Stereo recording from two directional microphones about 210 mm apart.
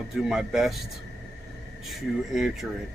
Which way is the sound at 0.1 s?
5° right (ahead or behind).